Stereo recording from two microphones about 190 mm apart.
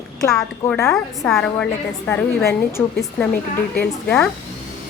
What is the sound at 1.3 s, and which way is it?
A woman's voice, 5° left (ahead or behind).